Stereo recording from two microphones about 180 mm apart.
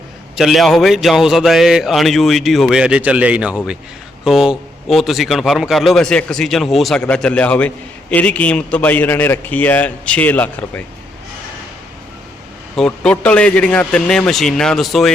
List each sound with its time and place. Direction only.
0.3 s a man's voice: centre (ahead or behind)
12.7 s a man's voice: 5° left (ahead or behind)